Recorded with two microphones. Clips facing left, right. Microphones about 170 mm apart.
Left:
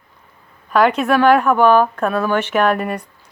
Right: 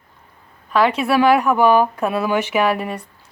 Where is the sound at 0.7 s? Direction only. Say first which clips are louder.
Left 2 dB; centre (ahead or behind).